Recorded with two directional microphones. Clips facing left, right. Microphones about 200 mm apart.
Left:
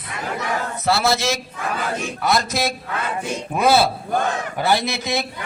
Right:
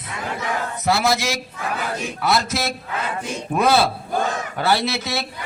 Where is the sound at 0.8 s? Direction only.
15° right (ahead or behind).